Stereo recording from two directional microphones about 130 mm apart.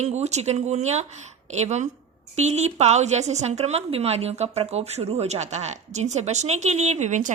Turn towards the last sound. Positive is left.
turn(degrees=-70)  # may be behind; listen again after turning